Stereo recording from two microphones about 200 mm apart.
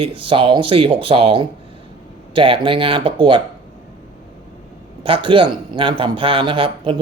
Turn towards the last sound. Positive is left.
turn(degrees=-25)  # may be behind; listen again after turning